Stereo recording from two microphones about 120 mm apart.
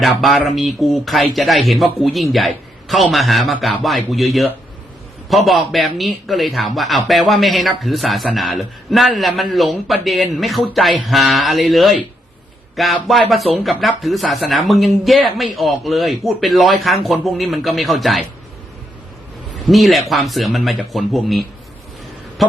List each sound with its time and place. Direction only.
0.0 s a man's voice: centre (ahead or behind)
19.6 s a man's voice: centre (ahead or behind)
22.4 s a sound: centre (ahead or behind)